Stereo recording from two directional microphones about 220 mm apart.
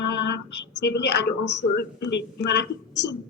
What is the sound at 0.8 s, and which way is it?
A woman's voice, 50° left (ahead or behind).